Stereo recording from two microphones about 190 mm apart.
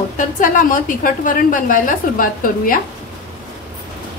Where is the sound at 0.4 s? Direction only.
45° left (ahead or behind).